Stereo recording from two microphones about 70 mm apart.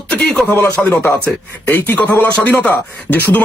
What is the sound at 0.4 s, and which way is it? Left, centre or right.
Speech, centre.